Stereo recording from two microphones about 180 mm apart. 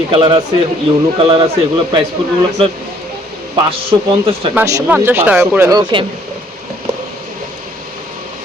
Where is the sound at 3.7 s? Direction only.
30° right (ahead or behind).